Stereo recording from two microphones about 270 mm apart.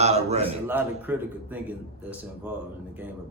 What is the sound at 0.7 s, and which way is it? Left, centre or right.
A man's voice, centre.